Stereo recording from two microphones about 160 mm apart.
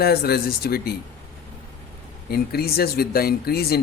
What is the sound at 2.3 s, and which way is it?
Speech, 75° left (ahead or behind).